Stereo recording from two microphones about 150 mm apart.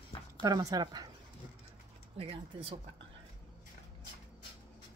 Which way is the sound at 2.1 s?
35° right (ahead or behind).